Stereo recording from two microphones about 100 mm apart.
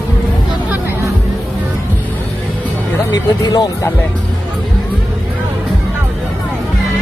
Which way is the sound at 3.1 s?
40° left (ahead or behind).